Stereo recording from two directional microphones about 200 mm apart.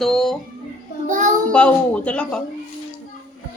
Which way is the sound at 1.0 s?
40° right (ahead or behind).